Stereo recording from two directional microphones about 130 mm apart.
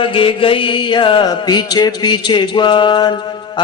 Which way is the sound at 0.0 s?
40° left (ahead or behind).